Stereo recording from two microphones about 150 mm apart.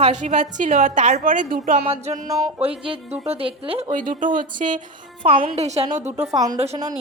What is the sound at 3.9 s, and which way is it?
A woman's voice, 60° right (ahead or behind).